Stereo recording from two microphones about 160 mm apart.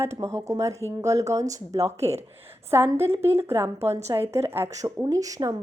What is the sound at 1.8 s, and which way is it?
Speech, 40° right (ahead or behind).